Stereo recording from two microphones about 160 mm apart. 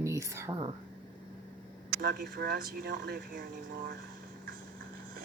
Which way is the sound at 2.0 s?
70° right (ahead or behind).